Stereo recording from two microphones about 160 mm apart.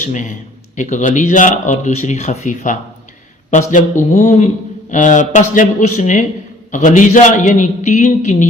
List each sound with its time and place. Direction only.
0.0 s speech: 50° left (ahead or behind)